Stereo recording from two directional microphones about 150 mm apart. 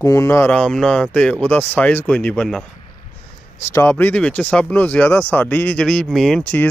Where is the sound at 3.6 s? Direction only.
15° left (ahead or behind).